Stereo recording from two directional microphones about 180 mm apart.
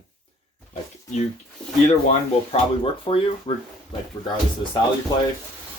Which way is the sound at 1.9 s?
35° left (ahead or behind).